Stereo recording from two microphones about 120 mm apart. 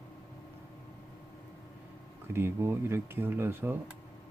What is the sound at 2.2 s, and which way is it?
Speech, 20° right (ahead or behind).